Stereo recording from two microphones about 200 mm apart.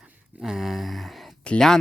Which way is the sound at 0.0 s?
5° right (ahead or behind).